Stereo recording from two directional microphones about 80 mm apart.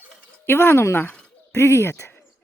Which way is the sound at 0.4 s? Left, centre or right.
Left.